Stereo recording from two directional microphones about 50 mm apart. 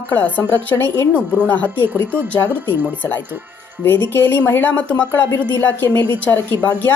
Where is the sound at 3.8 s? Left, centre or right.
Left.